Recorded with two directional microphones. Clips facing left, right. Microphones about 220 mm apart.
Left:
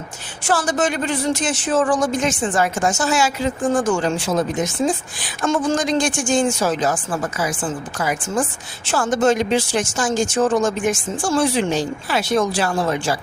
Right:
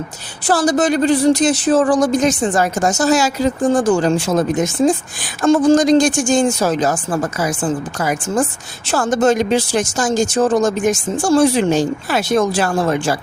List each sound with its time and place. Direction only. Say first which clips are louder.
0.4 s speech: right 5 dB; 35° right (ahead or behind)
5.2 s speech: right 8 dB; 35° right (ahead or behind)